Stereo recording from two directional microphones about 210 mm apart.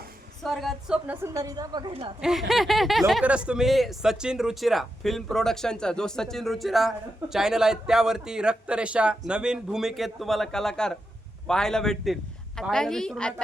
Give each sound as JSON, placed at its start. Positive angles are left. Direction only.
{"t": 0.4, "sound": "a woman's voice", "side_deg": 0}
{"t": 2.5, "sound": "speech", "side_deg": 0}